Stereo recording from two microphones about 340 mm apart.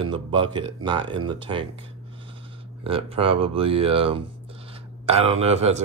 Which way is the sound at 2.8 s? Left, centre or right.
Centre.